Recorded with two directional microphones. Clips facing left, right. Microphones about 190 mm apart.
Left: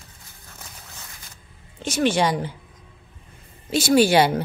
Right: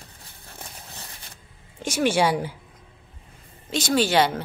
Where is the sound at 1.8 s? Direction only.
10° right (ahead or behind).